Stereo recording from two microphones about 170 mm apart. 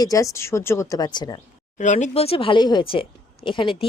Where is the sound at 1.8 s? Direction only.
45° left (ahead or behind).